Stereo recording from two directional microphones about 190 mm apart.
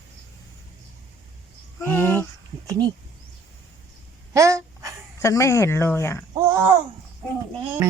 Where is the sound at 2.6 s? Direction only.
20° right (ahead or behind).